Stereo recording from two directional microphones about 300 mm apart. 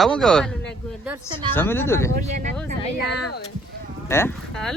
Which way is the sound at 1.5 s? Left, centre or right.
Centre.